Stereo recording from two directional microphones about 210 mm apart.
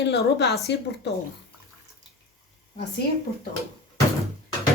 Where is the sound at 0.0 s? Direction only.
55° left (ahead or behind).